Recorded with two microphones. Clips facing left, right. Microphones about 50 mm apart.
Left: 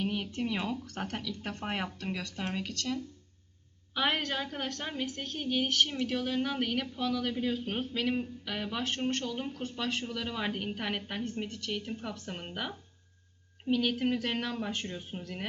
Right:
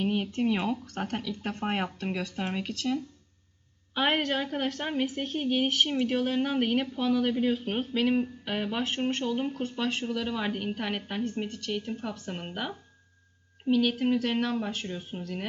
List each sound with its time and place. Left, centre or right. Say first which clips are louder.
0.0 s speech: right 5 dB; centre
0.9 s speech: right 4 dB; centre
1.1 s speech: right 4 dB; right
3.9 s a woman's voice: right 3 dB; right
4.2 s speech: right 6 dB; centre
5.6 s speech: right 2 dB; centre
5.9 s speech: right 5 dB; right
8.8 s speech: right 3 dB; centre
9.2 s speech: right 6 dB; centre